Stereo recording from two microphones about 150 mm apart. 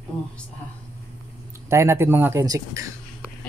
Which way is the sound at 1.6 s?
20° right (ahead or behind).